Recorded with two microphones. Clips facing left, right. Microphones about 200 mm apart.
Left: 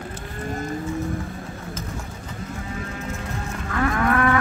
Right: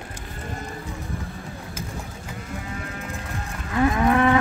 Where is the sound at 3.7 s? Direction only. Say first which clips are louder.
Right 2 dB; 20° right (ahead or behind).